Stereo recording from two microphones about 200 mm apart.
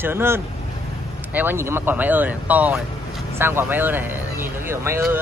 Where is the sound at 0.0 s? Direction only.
10° right (ahead or behind).